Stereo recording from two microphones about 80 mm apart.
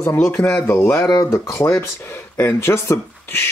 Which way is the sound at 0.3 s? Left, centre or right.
Centre.